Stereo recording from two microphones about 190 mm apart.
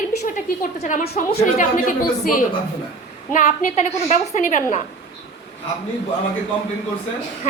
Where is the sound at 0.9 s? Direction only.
45° left (ahead or behind).